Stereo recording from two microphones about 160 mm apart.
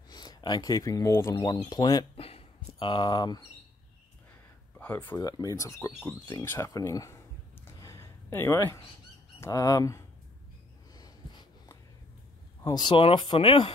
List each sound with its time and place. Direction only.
0.1 s speech: 25° left (ahead or behind)
2.2 s a sound: 35° left (ahead or behind)
4.7 s speech: 10° left (ahead or behind)
5.2 s speech: 20° left (ahead or behind)
7.6 s a sound: 20° left (ahead or behind)
9.4 s speech: 20° left (ahead or behind)
10.9 s snort: 25° left (ahead or behind)
12.6 s speech: 30° left (ahead or behind)